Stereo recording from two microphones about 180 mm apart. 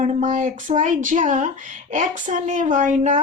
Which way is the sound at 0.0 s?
45° right (ahead or behind).